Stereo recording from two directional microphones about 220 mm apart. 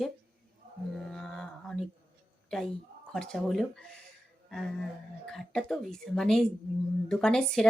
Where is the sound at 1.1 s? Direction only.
Centre (ahead or behind).